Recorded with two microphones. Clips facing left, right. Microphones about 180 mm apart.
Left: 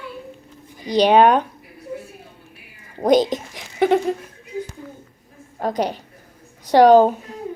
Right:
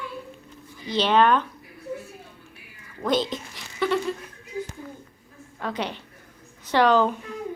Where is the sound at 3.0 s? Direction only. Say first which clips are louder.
Left 8 dB; 45° left (ahead or behind).